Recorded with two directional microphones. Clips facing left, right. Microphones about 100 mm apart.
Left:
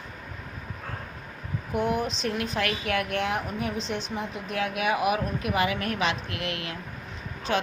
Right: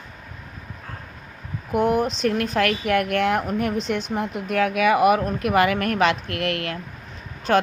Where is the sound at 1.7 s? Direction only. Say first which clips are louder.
Right 6 dB; 50° right (ahead or behind).